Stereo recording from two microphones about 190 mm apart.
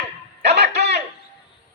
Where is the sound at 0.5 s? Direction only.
60° right (ahead or behind).